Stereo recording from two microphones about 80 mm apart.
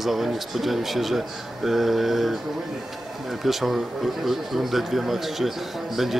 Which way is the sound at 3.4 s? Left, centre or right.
Centre.